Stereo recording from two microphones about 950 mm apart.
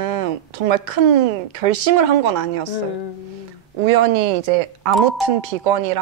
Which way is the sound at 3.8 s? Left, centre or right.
Right.